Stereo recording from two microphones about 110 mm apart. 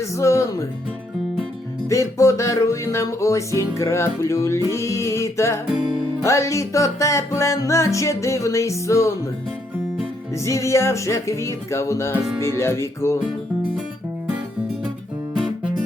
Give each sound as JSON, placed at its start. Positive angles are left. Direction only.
{"t": 0.0, "sound": "music", "side_deg": 25}
{"t": 1.9, "sound": "music", "side_deg": 30}
{"t": 10.3, "sound": "music", "side_deg": 25}